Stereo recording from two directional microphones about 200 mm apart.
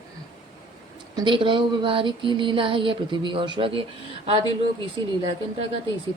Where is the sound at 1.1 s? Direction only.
25° right (ahead or behind).